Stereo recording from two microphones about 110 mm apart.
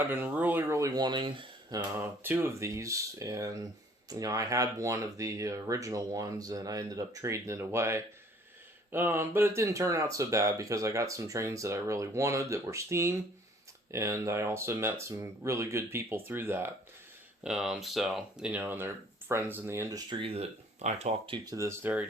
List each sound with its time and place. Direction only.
0.0 s speech: 15° right (ahead or behind); by 1.5 s 45° right (ahead or behind)
2.0 s speech: 20° right (ahead or behind)
17.4 s speech: 5° right (ahead or behind); by 20.0 s 25° right (ahead or behind)
20.1 s speech: 55° right (ahead or behind); by 21.2 s 90° right
21.2 s speech: 45° right (ahead or behind)
21.5 s speech: 25° right (ahead or behind)